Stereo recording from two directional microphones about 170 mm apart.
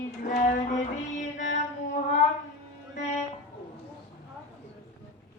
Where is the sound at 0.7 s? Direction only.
45° left (ahead or behind).